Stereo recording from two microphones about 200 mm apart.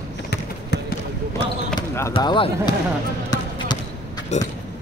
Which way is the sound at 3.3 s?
20° left (ahead or behind).